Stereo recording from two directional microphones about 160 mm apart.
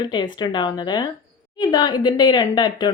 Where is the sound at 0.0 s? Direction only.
30° left (ahead or behind).